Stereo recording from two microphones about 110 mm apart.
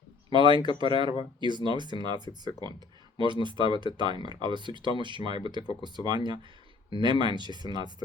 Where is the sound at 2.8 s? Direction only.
40° right (ahead or behind).